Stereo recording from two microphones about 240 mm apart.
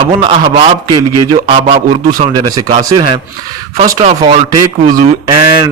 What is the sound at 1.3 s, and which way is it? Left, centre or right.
Speech, right.